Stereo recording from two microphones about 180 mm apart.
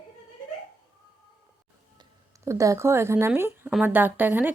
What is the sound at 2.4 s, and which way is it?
A woman's voice, 15° right (ahead or behind).